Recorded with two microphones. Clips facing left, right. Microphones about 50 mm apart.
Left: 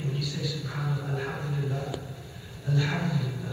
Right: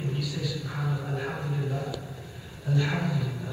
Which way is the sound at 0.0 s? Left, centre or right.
Centre.